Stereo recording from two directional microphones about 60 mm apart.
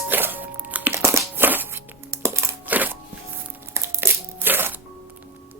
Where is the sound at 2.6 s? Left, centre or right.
Right.